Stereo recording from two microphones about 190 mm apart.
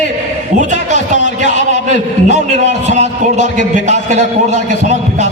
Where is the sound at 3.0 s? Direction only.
40° right (ahead or behind).